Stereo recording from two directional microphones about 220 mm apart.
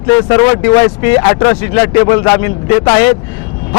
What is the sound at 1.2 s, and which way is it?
A man's voice, 20° left (ahead or behind).